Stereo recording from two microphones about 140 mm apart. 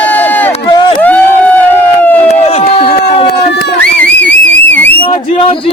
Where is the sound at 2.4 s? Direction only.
45° left (ahead or behind).